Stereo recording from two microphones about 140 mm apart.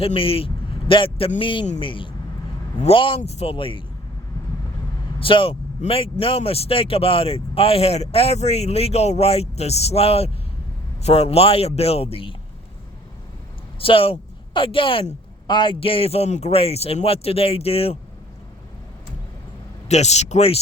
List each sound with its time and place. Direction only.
0.0 s a man's voice: 40° left (ahead or behind)
3.2 s speech: 50° left (ahead or behind)
5.2 s speech: 40° left (ahead or behind)
13.7 s speech: 40° left (ahead or behind)
19.9 s speech: 50° left (ahead or behind)